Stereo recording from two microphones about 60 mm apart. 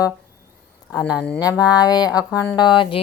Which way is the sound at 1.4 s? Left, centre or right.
Left.